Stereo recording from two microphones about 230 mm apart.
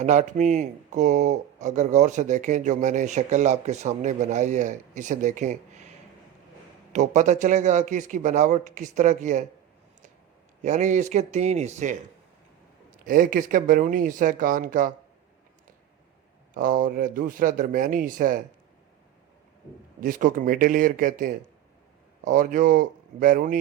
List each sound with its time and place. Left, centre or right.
0.0 s speech: right
6.9 s speech: right
10.6 s speech: right
16.6 s speech: right
20.0 s speech: right